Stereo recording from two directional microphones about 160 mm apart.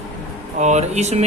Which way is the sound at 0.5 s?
45° right (ahead or behind).